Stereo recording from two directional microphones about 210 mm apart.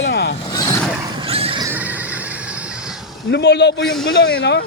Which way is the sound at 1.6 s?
10° right (ahead or behind).